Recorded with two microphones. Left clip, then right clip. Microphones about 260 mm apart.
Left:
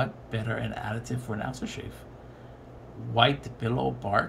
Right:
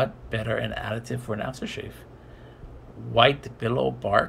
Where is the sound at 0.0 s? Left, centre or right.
Centre.